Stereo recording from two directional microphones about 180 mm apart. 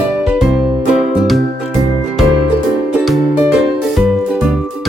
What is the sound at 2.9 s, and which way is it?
Music, 5° right (ahead or behind).